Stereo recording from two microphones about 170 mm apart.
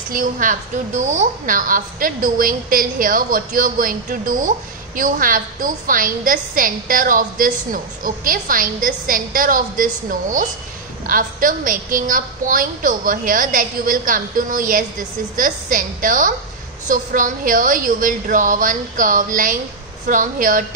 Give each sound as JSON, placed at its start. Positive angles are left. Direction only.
{"t": 0.1, "sound": "a woman's voice", "side_deg": -55}